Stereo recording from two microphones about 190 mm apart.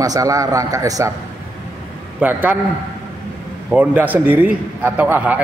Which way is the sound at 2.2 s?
10° right (ahead or behind).